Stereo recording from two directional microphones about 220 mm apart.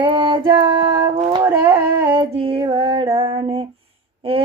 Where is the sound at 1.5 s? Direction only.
10° right (ahead or behind).